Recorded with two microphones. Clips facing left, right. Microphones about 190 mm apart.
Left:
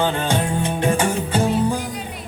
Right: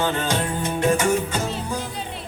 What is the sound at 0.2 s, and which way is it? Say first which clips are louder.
Music: left 3 dB; 30° left (ahead or behind).